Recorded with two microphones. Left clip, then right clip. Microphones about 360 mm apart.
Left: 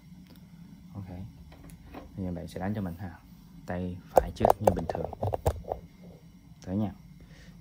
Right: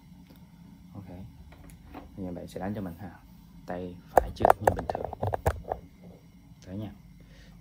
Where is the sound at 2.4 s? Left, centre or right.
Centre.